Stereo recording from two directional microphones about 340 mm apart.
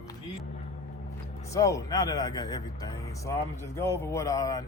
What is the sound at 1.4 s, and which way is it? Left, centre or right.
Speech, centre.